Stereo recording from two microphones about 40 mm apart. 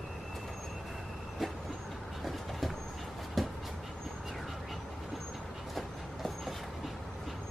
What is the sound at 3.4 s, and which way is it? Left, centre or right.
Vehicle, centre.